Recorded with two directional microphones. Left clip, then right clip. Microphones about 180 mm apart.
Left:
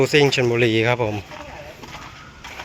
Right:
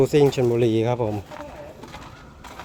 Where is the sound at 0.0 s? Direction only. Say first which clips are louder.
Left 2 dB; 20° right (ahead or behind).